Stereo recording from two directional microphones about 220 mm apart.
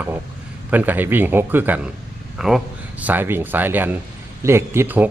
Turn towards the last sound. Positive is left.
turn(degrees=-10)  # may be behind; listen again after turning